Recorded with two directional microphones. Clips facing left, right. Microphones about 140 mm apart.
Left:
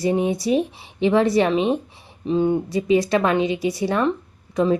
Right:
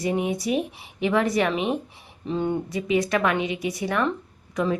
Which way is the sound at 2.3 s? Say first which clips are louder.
Left 6 dB; 15° left (ahead or behind).